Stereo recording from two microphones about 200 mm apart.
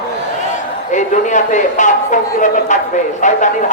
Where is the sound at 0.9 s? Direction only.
35° left (ahead or behind).